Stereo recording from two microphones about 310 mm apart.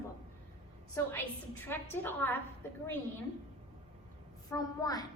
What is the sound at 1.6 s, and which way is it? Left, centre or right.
Speech, centre.